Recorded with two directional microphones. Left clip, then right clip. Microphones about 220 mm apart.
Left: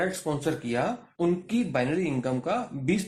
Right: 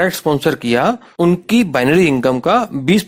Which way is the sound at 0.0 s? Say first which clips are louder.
Right 14 dB; 45° right (ahead or behind).